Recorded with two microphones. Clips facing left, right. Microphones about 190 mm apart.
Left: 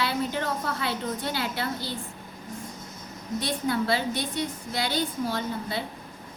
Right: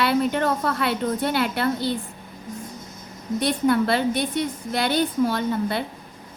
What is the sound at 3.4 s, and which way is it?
A woman's voice, 60° right (ahead or behind).